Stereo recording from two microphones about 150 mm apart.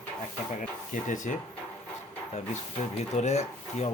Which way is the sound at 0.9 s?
60° left (ahead or behind).